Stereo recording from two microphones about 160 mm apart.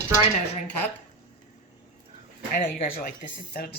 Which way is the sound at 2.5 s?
60° left (ahead or behind).